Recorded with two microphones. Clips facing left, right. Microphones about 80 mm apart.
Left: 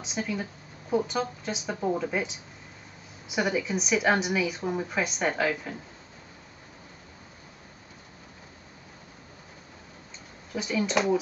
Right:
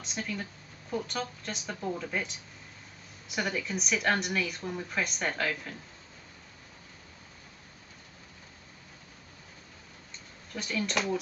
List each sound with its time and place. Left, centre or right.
0.0 s a woman's voice: centre
1.8 s speech: centre
3.3 s a woman's voice: centre
10.5 s a woman's voice: centre